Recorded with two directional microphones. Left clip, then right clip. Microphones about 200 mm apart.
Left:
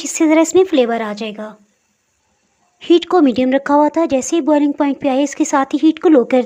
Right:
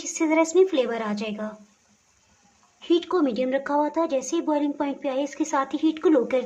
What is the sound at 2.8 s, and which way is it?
Speech, 35° left (ahead or behind).